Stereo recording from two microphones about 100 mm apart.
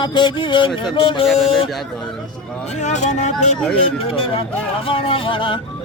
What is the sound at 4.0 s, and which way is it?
Speech, 65° left (ahead or behind).